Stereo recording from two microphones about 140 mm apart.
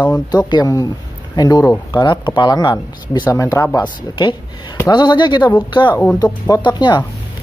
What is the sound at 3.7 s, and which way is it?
Speech, 35° left (ahead or behind).